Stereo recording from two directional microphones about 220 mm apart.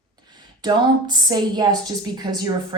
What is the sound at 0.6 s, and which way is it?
A woman's voice, 20° right (ahead or behind).